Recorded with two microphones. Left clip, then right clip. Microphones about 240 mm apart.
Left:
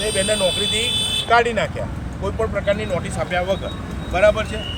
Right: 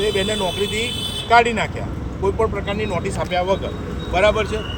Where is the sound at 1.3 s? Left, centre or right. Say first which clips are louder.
Right 2 dB; centre.